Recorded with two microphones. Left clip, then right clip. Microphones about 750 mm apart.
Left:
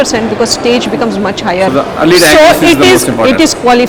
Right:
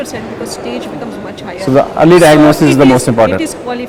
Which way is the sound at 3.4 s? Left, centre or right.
Left.